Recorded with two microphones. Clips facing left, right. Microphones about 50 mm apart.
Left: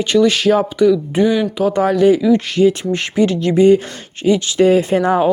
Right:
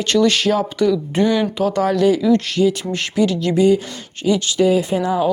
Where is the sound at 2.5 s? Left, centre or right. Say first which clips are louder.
Left 4 dB; left.